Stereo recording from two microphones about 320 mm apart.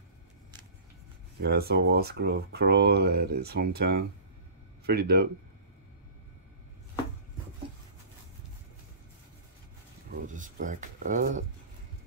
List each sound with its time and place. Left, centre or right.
1.4 s speech: right
10.1 s speech: right